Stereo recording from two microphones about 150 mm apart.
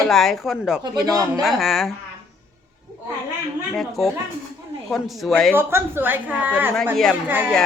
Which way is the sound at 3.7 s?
Centre (ahead or behind).